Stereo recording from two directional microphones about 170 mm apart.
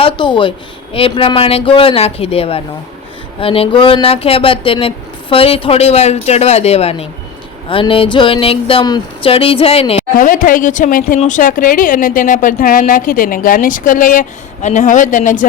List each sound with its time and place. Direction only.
0.0 s speech: 30° left (ahead or behind)
10.2 s speech: 55° left (ahead or behind)